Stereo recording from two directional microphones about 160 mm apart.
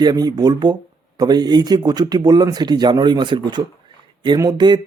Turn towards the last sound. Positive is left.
turn(degrees=-25)  # may be behind; listen again after turning